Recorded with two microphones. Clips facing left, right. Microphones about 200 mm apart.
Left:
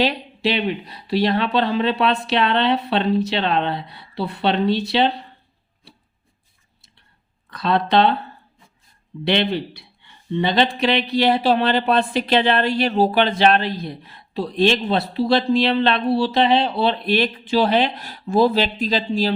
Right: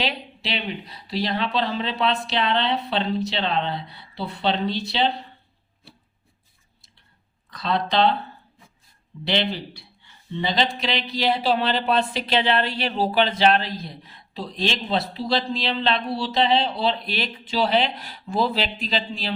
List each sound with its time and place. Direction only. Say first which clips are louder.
0.5 s speech: left 7 dB; 55° left (ahead or behind)
7.5 s speech: left 5 dB; 60° left (ahead or behind)
9.2 s speech: left 5 dB; 60° left (ahead or behind); by 19.3 s 45° left (ahead or behind)